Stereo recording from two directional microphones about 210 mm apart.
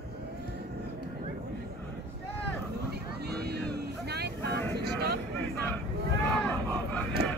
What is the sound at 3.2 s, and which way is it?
Vehicle, 50° right (ahead or behind).